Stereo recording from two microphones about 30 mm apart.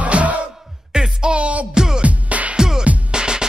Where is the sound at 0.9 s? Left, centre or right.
Right.